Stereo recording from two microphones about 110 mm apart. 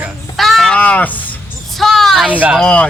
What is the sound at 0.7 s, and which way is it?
Speech, 15° left (ahead or behind).